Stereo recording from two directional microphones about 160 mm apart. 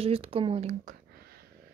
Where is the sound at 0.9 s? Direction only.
75° right (ahead or behind).